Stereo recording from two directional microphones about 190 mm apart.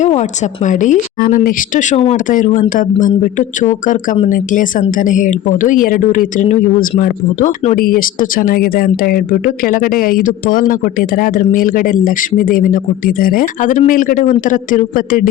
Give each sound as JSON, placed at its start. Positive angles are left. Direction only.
{"t": 0.0, "sound": "speech", "side_deg": 40}